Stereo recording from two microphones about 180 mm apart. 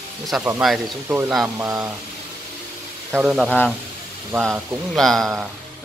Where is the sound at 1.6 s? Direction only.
20° right (ahead or behind).